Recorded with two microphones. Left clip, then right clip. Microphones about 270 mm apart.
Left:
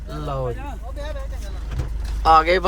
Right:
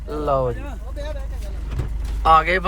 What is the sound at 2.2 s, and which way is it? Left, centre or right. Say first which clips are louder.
Speech: left 1 dB; centre.